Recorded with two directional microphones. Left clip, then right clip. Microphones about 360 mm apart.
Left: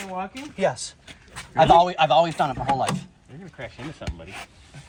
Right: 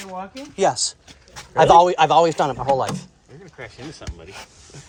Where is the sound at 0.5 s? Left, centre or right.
Centre.